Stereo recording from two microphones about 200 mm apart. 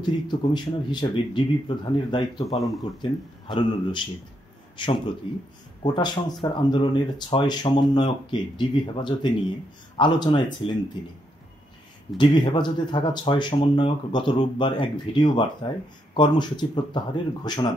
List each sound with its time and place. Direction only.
0.0 s speech: 25° left (ahead or behind)
2.5 s speech: centre (ahead or behind)
3.0 s speech: 25° left (ahead or behind)
12.2 s speech: 25° left (ahead or behind)